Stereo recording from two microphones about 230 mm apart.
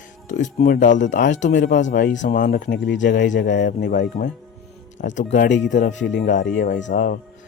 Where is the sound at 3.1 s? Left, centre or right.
Left.